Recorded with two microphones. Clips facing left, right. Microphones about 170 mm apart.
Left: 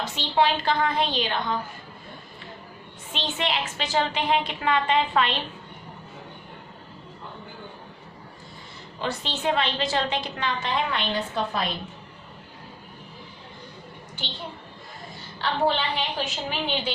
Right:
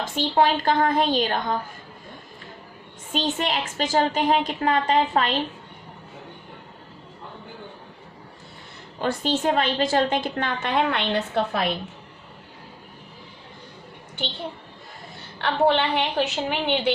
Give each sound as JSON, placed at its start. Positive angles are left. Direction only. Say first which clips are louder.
{"t": 0.1, "sound": "a woman's voice", "louder": "right 3 dB", "side_deg": -45}
{"t": 3.1, "sound": "a woman's voice", "louder": "right 4 dB", "side_deg": -45}
{"t": 9.0, "sound": "a woman's voice", "louder": "right 6 dB", "side_deg": -50}
{"t": 15.4, "sound": "a woman's voice", "louder": "right 4 dB", "side_deg": -60}